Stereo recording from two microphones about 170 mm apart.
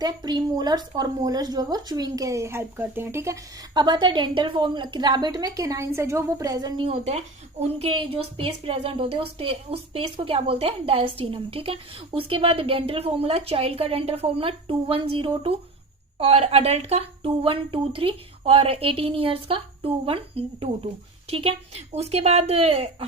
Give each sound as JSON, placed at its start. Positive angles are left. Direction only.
{"t": 0.0, "sound": "a woman's voice", "side_deg": -25}